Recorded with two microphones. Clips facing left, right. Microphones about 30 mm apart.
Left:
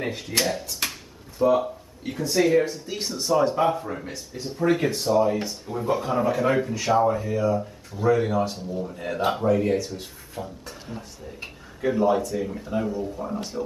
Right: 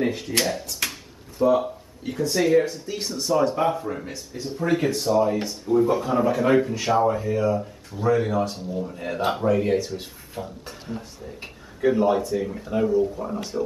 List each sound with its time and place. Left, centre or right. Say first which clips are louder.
0.0 s speech: right 2 dB; centre
12.0 s speech: right 1 dB; centre